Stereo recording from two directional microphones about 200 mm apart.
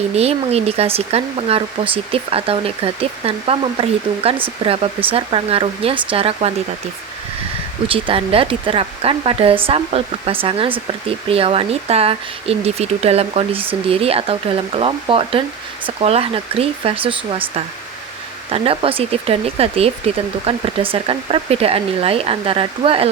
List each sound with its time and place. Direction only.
0.1 s speech: 30° right (ahead or behind)
7.9 s speech: 25° right (ahead or behind)